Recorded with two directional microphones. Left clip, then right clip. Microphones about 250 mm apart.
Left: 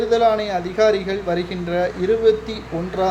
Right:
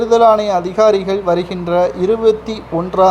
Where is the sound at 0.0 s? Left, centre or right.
Centre.